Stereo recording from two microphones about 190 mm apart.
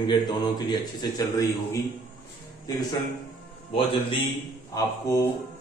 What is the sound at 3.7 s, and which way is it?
Speech, 30° left (ahead or behind).